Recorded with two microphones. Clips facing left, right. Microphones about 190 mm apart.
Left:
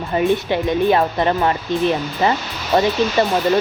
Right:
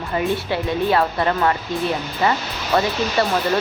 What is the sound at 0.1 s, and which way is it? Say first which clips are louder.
A woman's voice: left 4 dB; 20° left (ahead or behind).